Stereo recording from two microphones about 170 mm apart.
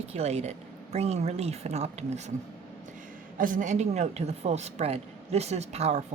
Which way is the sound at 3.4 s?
50° right (ahead or behind).